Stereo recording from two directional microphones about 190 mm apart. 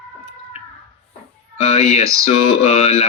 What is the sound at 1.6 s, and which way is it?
Music, 35° left (ahead or behind).